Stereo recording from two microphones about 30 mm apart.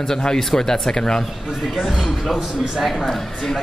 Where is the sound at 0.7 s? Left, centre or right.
Left.